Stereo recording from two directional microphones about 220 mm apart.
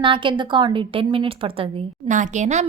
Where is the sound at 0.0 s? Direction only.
20° right (ahead or behind).